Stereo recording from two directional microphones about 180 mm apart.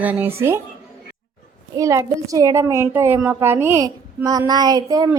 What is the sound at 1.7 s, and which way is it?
A woman's voice, 15° right (ahead or behind).